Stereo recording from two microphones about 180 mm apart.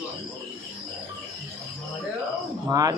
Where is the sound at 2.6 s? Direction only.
20° right (ahead or behind).